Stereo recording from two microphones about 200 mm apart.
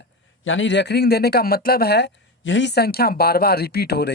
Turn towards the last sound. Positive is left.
turn(degrees=55)  # may be behind; listen again after turning